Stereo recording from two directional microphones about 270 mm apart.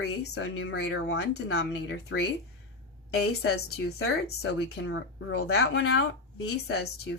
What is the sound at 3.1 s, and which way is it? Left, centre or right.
Speech, left.